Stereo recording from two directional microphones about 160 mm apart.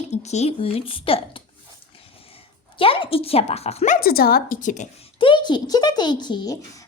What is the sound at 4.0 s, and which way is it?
Speech, 70° left (ahead or behind).